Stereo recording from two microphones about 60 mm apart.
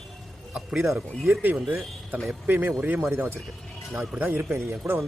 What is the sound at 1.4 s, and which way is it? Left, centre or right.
Speech, right.